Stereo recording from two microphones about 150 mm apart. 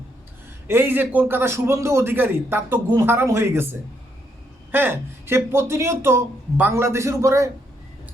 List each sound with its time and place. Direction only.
0.7 s a man's voice: 15° right (ahead or behind)